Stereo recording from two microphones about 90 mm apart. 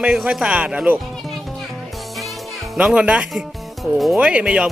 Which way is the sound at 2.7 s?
10° right (ahead or behind).